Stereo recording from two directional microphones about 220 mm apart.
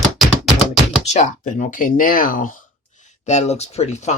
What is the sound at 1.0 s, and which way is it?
Speech, 30° left (ahead or behind).